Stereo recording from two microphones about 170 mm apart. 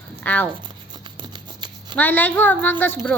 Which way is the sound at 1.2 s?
25° right (ahead or behind).